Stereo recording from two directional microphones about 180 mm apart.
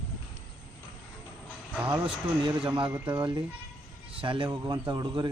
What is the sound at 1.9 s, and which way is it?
Speech, 25° right (ahead or behind).